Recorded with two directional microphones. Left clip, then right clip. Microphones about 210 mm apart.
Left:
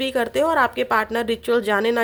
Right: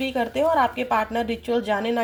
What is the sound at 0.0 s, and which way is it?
A woman's voice, 50° left (ahead or behind).